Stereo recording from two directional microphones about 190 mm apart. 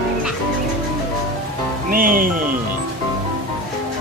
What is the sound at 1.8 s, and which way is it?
Speech, 45° right (ahead or behind).